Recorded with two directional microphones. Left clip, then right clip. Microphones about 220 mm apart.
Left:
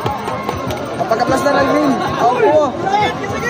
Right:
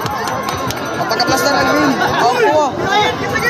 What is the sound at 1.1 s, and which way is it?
Speech, 35° left (ahead or behind).